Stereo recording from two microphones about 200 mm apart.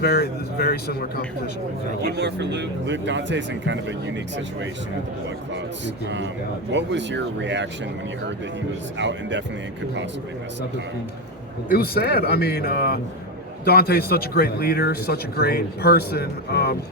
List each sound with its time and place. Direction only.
0.0 s speech: 50° left (ahead or behind)
2.0 s speech: 55° right (ahead or behind)
5.8 s speech: 65° right (ahead or behind)
9.0 s speech: 65° right (ahead or behind)
11.7 s speech: 50° left (ahead or behind)